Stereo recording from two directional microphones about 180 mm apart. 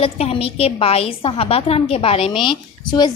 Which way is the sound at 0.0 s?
35° left (ahead or behind).